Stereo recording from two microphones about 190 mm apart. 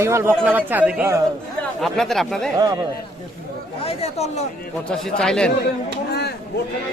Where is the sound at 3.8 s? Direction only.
30° left (ahead or behind).